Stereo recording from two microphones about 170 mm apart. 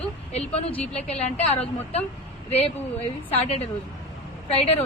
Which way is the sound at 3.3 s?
40° left (ahead or behind).